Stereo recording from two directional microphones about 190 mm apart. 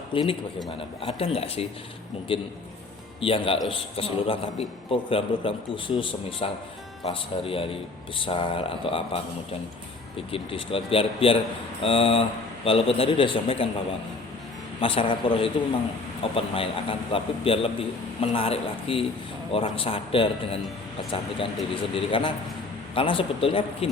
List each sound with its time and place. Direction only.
0.1 s a man's voice: 30° left (ahead or behind)
14.8 s a man's voice: 30° left (ahead or behind)